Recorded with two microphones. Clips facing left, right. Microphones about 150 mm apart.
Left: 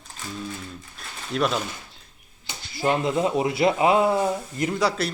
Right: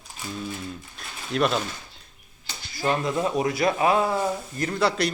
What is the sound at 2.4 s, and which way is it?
Speech, 20° left (ahead or behind).